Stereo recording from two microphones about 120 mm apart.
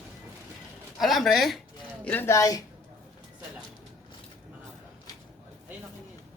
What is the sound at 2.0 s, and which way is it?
Speech, 15° left (ahead or behind).